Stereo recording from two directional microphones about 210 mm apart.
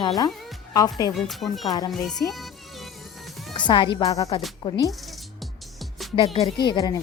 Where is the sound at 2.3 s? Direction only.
Centre (ahead or behind).